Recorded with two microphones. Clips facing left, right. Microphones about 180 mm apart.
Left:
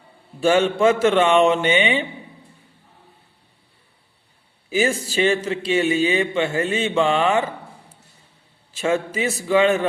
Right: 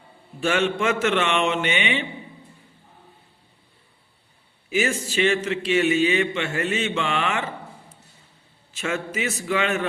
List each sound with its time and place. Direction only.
0.3 s speech: 30° left (ahead or behind)
4.7 s speech: 30° left (ahead or behind)
8.8 s speech: 30° left (ahead or behind)